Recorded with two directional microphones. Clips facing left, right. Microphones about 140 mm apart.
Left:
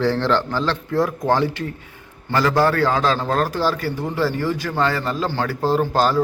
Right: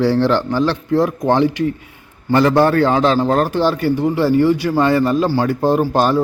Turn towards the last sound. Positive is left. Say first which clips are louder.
# right 3 dB
turn(degrees=-20)  # may be behind; listen again after turning